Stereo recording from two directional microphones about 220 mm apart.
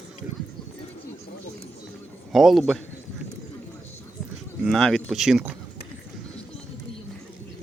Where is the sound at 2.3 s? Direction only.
Centre (ahead or behind).